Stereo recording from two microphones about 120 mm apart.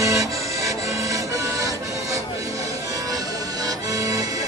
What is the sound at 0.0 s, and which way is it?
Accordion, 25° right (ahead or behind).